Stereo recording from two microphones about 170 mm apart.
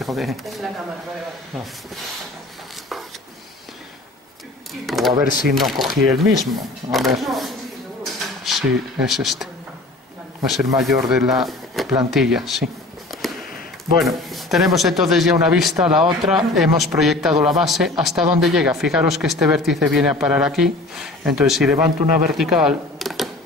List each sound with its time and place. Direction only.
0.0 s a man's voice: centre (ahead or behind)
4.8 s a sound: centre (ahead or behind)
5.5 s a man's voice: centre (ahead or behind)
10.8 s a man's voice: centre (ahead or behind)
13.2 s a sound: centre (ahead or behind)
13.9 s a man's voice: centre (ahead or behind)